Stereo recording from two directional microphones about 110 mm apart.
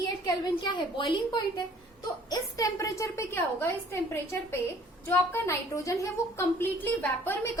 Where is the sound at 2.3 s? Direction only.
30° left (ahead or behind).